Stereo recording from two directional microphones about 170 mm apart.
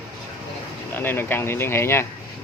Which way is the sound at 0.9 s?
10° left (ahead or behind).